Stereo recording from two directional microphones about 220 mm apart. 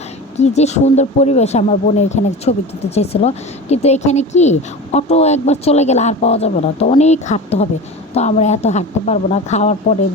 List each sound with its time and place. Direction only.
0.3 s speech: 30° left (ahead or behind)